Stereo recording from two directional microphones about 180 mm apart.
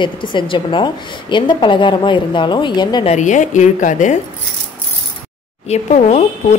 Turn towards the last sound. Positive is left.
turn(degrees=40)  # may be behind; listen again after turning